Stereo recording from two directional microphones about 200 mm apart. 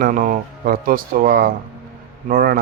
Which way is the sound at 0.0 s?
40° right (ahead or behind).